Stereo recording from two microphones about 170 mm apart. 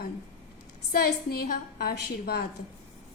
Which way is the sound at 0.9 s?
65° left (ahead or behind).